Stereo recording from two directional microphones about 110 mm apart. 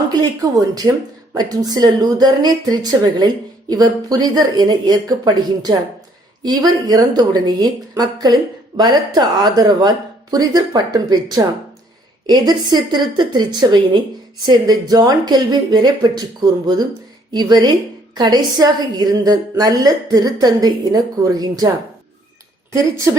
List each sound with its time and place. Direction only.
0.7 s speech: 35° right (ahead or behind)